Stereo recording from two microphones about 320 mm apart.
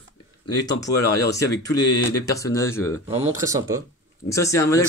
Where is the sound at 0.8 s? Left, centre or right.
Centre.